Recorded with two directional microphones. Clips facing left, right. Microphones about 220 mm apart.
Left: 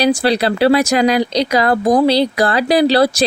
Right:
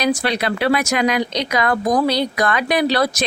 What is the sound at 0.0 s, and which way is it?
Speech, 30° left (ahead or behind).